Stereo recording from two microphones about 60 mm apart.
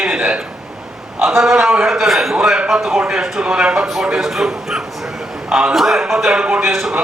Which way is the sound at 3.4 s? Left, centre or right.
Centre.